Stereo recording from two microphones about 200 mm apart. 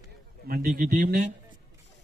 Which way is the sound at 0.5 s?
50° right (ahead or behind).